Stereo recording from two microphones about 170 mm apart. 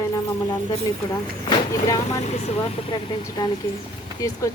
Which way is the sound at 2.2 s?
40° left (ahead or behind).